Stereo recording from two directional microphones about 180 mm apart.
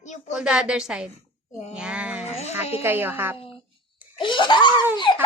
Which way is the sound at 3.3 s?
30° left (ahead or behind).